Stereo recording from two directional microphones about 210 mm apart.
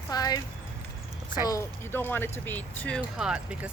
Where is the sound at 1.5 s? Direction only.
10° left (ahead or behind); by 3.5 s 5° right (ahead or behind).